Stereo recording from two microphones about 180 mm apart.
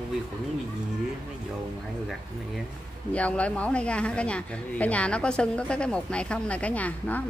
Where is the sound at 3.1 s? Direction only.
5° left (ahead or behind).